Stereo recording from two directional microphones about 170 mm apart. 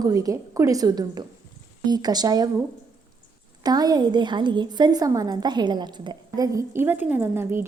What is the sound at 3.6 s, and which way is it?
A woman's voice, 25° right (ahead or behind).